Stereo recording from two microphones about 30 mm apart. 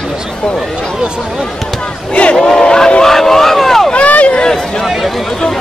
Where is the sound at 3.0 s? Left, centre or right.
Centre.